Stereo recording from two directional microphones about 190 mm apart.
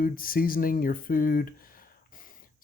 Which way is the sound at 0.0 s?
50° left (ahead or behind).